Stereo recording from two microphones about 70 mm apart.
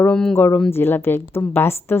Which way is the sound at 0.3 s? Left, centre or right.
Left.